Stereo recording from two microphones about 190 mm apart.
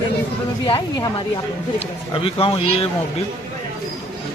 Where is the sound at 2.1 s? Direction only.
30° left (ahead or behind).